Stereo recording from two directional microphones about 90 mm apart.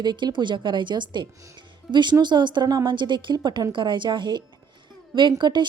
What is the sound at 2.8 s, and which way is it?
A woman's voice, 60° right (ahead or behind).